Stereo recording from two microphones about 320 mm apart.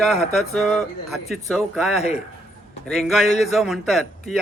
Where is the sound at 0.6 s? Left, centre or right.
Centre.